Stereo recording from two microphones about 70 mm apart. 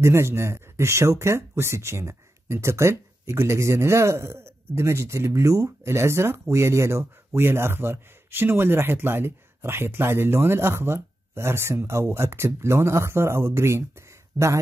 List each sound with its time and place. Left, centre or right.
0.0 s speech: right